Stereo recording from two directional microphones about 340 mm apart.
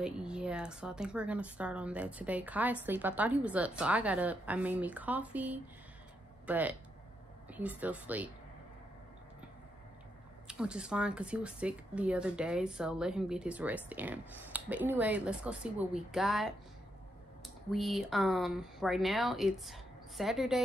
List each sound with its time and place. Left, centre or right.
0.0 s speech: centre
10.4 s speech: centre